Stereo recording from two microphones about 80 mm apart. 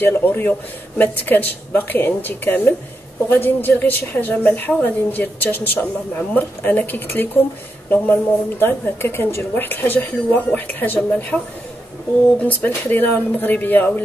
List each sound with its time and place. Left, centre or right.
0.0 s a woman's voice: left
12.4 s a woman's voice: left